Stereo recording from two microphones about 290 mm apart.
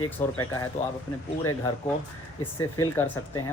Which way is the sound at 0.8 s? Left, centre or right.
Left.